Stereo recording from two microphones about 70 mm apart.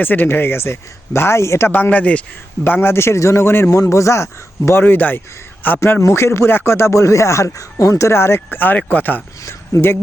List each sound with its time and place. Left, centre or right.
0.0 s speech: left
1.7 s speech: left
2.6 s speech: left
3.7 s a man's voice: left
4.8 s speech: left
6.0 s speech: left
9.5 s speech: left